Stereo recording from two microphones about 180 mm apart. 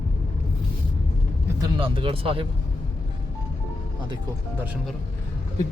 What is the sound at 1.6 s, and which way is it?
Speech, 30° right (ahead or behind).